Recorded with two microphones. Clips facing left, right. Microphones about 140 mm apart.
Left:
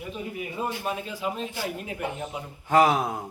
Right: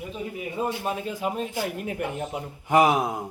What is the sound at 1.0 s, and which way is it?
Speech, 50° right (ahead or behind).